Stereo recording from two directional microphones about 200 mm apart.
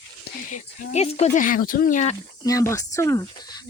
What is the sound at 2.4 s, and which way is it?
Speech, 15° left (ahead or behind).